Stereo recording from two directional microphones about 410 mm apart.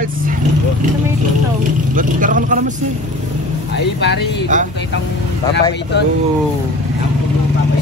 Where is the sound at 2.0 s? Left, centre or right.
Centre.